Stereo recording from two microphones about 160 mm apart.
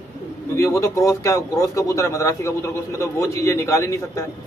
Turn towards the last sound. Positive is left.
turn(degrees=20)  # may be behind; listen again after turning